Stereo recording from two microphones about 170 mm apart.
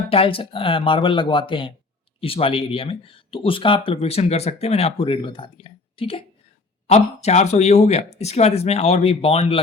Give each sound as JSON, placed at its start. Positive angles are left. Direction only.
{"t": 0.1, "sound": "speech", "side_deg": 35}